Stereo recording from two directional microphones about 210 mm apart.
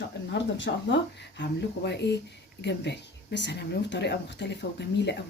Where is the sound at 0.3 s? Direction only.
55° left (ahead or behind).